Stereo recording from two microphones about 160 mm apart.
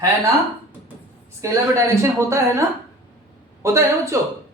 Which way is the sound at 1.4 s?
20° right (ahead or behind).